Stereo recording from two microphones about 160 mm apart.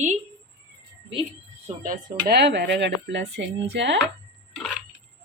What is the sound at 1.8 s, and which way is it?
Speech, 70° right (ahead or behind).